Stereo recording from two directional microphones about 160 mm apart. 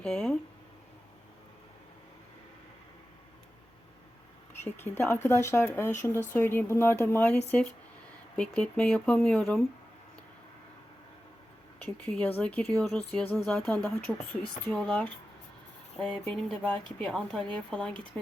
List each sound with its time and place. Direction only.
0.0 s speech: 5° left (ahead or behind)
4.6 s speech: 15° left (ahead or behind)
11.9 s speech: 5° left (ahead or behind)